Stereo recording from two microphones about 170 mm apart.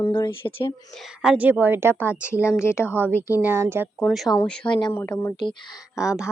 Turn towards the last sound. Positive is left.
turn(degrees=-5)  # may be behind; listen again after turning